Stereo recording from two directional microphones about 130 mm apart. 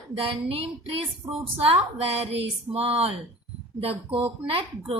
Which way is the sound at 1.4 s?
45° right (ahead or behind).